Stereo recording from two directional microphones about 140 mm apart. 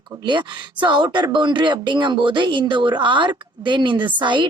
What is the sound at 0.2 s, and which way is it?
Speech, 35° right (ahead or behind).